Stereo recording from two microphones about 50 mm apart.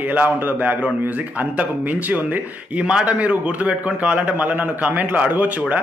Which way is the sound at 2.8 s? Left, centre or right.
Centre.